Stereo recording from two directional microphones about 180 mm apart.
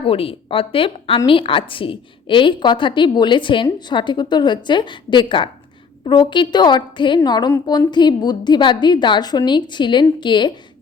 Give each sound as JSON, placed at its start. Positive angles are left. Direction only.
{"t": 0.0, "sound": "a woman's voice", "side_deg": 30}